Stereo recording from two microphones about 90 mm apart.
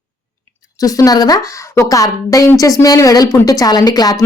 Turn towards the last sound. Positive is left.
turn(degrees=45)  # may be behind; listen again after turning